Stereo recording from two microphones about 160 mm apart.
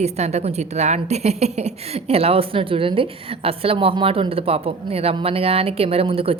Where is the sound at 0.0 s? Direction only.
45° right (ahead or behind).